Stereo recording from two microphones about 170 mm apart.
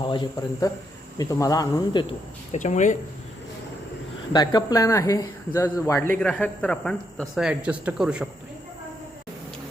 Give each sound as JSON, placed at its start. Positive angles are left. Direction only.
{"t": 0.0, "sound": "speech", "side_deg": 25}
{"t": 2.5, "sound": "speech", "side_deg": 45}
{"t": 4.3, "sound": "speech", "side_deg": 25}